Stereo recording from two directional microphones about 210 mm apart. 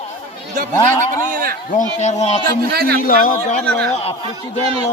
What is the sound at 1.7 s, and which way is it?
Speech, 35° left (ahead or behind).